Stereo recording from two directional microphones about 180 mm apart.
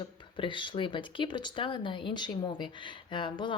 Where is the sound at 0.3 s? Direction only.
25° left (ahead or behind).